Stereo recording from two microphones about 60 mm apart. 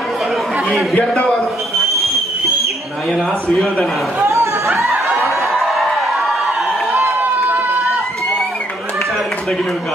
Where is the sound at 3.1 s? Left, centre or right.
Centre.